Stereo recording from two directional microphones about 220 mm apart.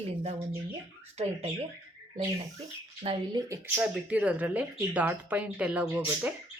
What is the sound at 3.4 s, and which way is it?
Speech, 10° right (ahead or behind).